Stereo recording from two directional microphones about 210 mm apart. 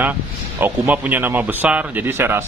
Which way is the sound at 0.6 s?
10° right (ahead or behind).